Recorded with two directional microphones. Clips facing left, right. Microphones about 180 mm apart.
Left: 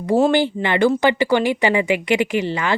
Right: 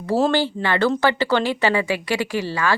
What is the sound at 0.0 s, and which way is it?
Speech, 15° left (ahead or behind).